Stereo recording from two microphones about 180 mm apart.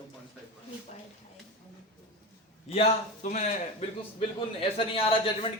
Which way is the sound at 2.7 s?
40° left (ahead or behind).